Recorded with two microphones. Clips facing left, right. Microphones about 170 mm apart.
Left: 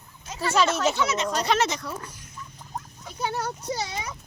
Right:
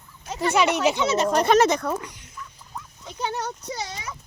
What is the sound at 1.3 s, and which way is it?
Speech, 50° right (ahead or behind).